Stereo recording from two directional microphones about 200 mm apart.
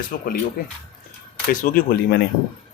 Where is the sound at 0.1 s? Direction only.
45° left (ahead or behind).